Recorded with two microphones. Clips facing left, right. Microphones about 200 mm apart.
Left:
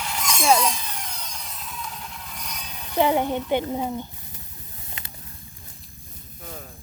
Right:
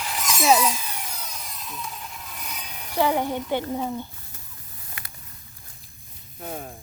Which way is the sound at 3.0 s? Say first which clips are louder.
Left 2 dB; 20° left (ahead or behind).